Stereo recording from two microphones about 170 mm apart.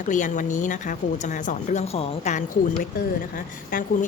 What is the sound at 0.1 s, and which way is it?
Speech, 50° left (ahead or behind).